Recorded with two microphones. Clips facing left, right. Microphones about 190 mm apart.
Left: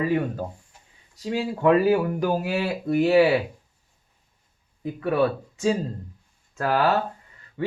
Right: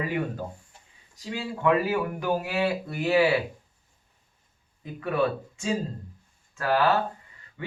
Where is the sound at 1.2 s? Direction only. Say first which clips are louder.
Left 5 dB; 40° left (ahead or behind).